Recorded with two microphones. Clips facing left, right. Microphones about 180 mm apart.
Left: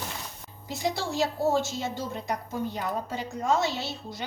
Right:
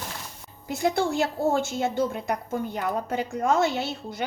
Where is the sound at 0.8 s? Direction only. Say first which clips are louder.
Right 4 dB; 55° right (ahead or behind).